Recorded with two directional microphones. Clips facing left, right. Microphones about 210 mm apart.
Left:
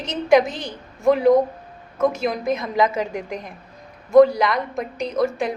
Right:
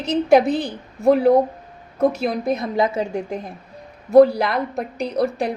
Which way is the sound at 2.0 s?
35° right (ahead or behind).